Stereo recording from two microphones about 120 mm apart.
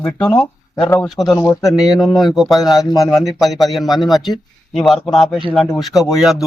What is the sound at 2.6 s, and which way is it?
Speech, 35° left (ahead or behind).